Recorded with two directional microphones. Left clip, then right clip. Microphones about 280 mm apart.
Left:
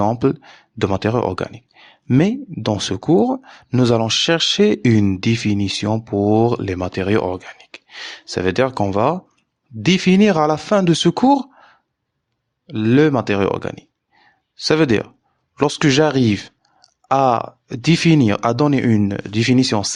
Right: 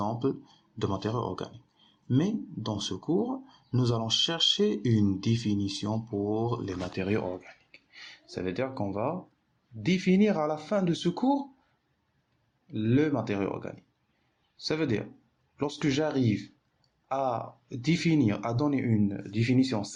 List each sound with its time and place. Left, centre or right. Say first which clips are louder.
0.0 s speech: left 13 dB; left
12.6 s speech: left 13 dB; left